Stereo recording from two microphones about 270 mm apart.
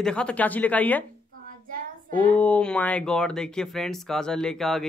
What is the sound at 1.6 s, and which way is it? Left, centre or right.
Child singing, right.